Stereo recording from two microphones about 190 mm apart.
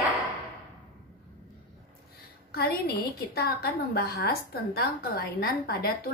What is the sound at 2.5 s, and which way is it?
A woman's voice, 55° left (ahead or behind).